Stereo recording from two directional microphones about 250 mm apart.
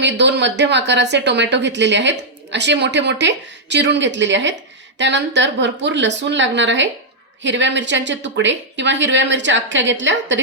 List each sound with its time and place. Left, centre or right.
0.0 s a woman's voice: right